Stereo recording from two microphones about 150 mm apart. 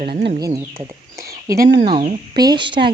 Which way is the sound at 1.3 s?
20° right (ahead or behind).